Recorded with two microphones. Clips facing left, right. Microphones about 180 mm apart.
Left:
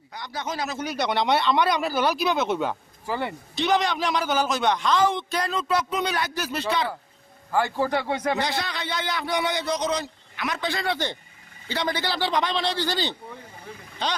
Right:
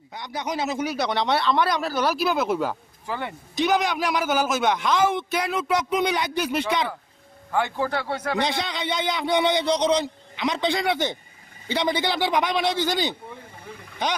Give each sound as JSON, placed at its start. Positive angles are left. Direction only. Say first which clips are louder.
{"t": 0.1, "sound": "a man's voice", "louder": "right 3 dB", "side_deg": -20}
{"t": 0.8, "sound": "speech", "louder": "left 3 dB", "side_deg": 0}
{"t": 3.6, "sound": "a man's voice", "louder": "right 1 dB", "side_deg": -10}
{"t": 7.5, "sound": "speech", "louder": "left 1 dB", "side_deg": 5}
{"t": 8.4, "sound": "a man's voice", "louder": "right 2 dB", "side_deg": -20}